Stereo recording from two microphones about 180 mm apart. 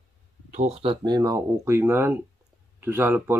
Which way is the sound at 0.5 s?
40° right (ahead or behind).